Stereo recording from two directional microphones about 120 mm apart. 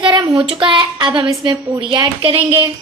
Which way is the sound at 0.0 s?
40° right (ahead or behind).